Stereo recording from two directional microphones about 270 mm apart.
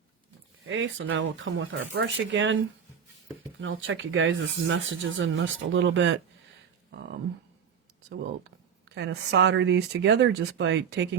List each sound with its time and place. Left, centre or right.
0.7 s speech: right
3.6 s speech: right
9.0 s speech: right